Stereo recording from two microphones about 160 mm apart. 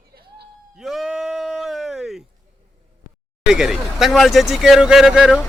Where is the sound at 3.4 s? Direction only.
5° right (ahead or behind).